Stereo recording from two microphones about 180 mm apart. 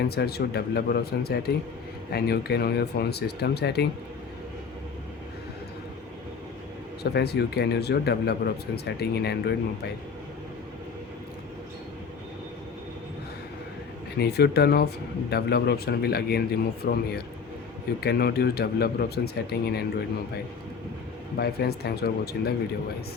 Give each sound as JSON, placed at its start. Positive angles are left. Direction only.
{"t": 0.1, "sound": "speech", "side_deg": 60}
{"t": 7.0, "sound": "speech", "side_deg": 65}
{"t": 14.2, "sound": "speech", "side_deg": 65}
{"t": 21.3, "sound": "speech", "side_deg": 60}